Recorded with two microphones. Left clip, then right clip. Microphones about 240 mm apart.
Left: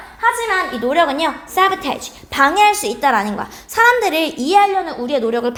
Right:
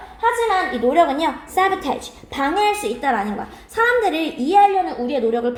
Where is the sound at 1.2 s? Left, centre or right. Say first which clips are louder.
Left 3 dB; left.